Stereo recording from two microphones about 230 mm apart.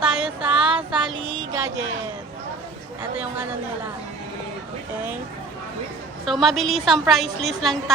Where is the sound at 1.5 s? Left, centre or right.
Centre.